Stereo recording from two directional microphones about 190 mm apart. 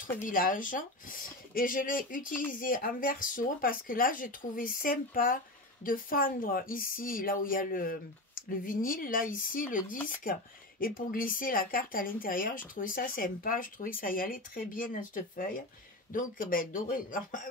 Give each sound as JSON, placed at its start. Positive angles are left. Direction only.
{"t": 0.2, "sound": "a woman's voice", "side_deg": 45}